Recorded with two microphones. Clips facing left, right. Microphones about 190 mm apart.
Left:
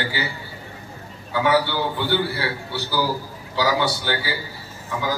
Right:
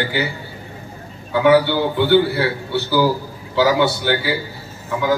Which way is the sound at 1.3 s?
55° right (ahead or behind).